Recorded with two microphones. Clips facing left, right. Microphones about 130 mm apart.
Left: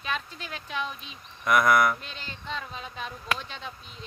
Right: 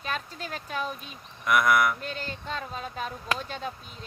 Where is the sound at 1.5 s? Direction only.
5° right (ahead or behind).